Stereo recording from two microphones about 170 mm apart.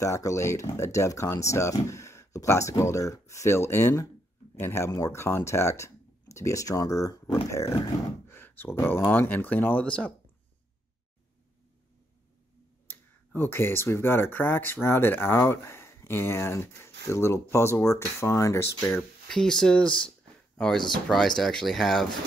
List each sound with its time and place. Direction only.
0.0 s speech: 20° left (ahead or behind)
12.8 s speech: 10° left (ahead or behind)
18.9 s speech: 5° left (ahead or behind)